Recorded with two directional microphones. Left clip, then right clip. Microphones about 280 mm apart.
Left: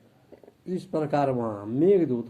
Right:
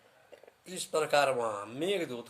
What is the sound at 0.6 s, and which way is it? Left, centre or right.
Speech, centre.